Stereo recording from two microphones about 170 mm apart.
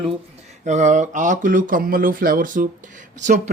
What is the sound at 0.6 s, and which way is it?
A man's voice, 45° right (ahead or behind).